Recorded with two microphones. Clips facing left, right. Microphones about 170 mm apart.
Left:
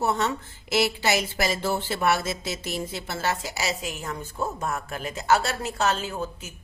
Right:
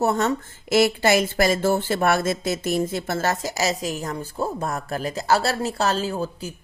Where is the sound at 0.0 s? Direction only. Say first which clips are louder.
Right 4 dB; 45° right (ahead or behind).